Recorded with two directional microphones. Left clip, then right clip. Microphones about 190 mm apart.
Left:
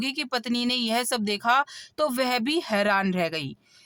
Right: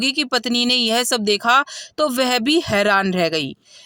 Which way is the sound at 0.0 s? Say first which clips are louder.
Right 9 dB; 25° right (ahead or behind).